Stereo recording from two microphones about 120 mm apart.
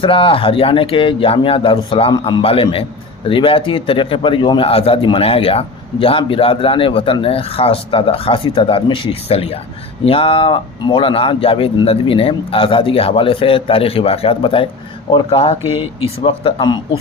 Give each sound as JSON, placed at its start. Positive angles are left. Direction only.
{"t": 0.0, "sound": "a man's voice", "side_deg": 45}
{"t": 2.1, "sound": "a man's voice", "side_deg": 40}